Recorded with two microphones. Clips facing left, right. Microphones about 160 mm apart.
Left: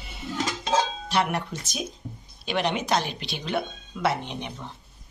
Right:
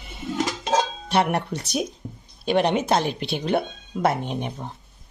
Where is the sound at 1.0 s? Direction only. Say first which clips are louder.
Right 4 dB; 60° right (ahead or behind).